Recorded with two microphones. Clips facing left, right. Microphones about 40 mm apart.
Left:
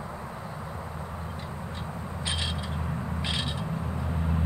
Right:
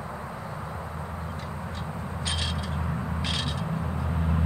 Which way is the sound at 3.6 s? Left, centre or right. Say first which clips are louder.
Right 2 dB; centre.